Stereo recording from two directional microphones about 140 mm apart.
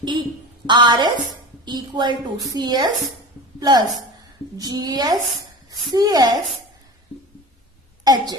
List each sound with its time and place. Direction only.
0.0 s a woman's voice: 35° right (ahead or behind)
8.0 s speech: 30° right (ahead or behind)